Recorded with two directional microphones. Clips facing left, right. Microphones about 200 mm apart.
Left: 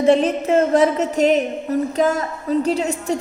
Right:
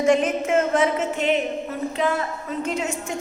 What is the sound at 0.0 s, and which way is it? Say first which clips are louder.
A woman's voice: left 4 dB; 35° left (ahead or behind).